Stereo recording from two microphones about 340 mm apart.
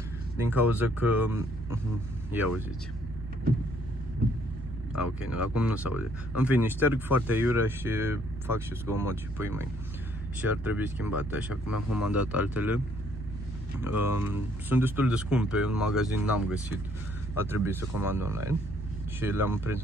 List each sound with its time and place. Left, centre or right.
0.5 s speech: centre
4.9 s speech: centre
11.6 s speech: left
12.1 s speech: centre